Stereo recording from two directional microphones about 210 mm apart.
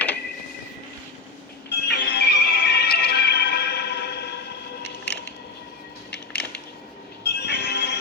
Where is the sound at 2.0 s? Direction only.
50° left (ahead or behind).